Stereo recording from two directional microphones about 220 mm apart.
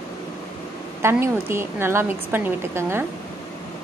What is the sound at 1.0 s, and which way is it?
A woman's voice, 10° right (ahead or behind).